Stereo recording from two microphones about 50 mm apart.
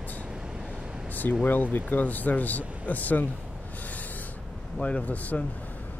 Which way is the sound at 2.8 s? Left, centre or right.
Left.